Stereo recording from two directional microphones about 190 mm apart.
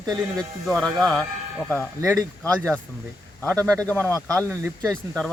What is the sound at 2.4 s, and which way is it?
Speech, 5° left (ahead or behind).